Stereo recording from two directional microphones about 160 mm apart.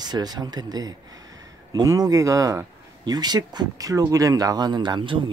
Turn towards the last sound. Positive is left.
turn(degrees=-30)  # may be behind; listen again after turning